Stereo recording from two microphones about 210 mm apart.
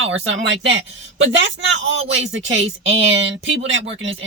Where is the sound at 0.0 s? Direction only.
65° right (ahead or behind).